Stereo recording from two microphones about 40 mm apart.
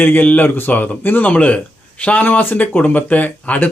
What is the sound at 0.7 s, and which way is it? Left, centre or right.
Speech, left.